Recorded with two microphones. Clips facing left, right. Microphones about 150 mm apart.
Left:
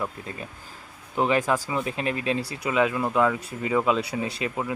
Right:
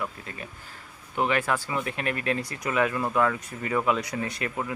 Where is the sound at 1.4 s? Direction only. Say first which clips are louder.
Left 3 dB; 15° left (ahead or behind).